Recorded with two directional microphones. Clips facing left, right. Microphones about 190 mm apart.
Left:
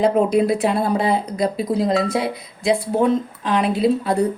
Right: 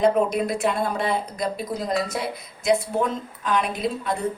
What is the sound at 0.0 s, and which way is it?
Speech, 30° left (ahead or behind).